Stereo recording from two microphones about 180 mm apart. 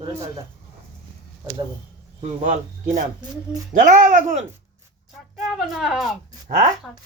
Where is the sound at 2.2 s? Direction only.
40° right (ahead or behind).